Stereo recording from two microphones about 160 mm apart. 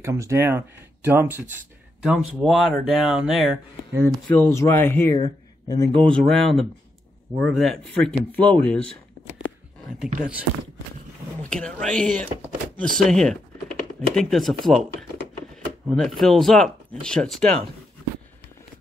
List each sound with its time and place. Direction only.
0.0 s speech: 20° right (ahead or behind)
2.0 s speech: centre (ahead or behind)
5.1 s speech: 25° left (ahead or behind)
6.1 s speech: 5° left (ahead or behind)
11.4 s speech: 5° left (ahead or behind)